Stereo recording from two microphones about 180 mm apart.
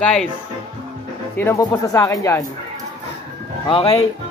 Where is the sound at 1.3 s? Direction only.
15° left (ahead or behind).